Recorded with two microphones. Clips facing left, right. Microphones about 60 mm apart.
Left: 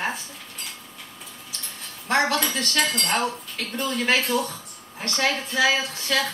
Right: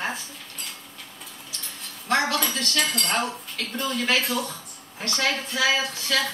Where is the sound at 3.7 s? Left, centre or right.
Left.